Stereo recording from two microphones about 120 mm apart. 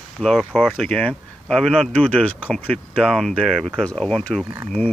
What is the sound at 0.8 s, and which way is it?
Speech, 10° left (ahead or behind).